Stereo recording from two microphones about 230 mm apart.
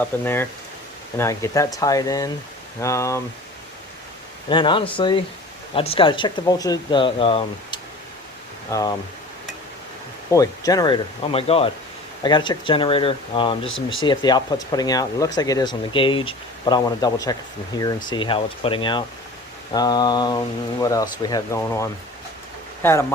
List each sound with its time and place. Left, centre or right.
0.0 s speech: centre
4.4 s speech: left
10.3 s speech: centre
13.7 s speech: left
14.0 s speech: centre